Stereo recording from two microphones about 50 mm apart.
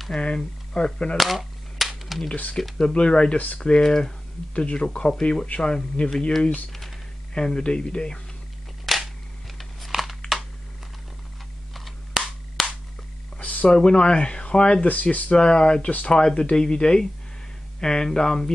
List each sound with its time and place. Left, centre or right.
0.1 s speech: centre
1.1 s cap gun: centre
2.8 s speech: centre
6.7 s typing: centre
7.3 s speech: centre
8.8 s camera: centre
9.6 s a sound: centre
11.7 s a sound: centre
13.4 s a sound: left
13.7 s speech: centre
14.9 s speech: left
15.3 s speech: centre